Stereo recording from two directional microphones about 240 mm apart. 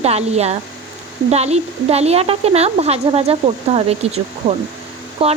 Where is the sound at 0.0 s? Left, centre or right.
Right.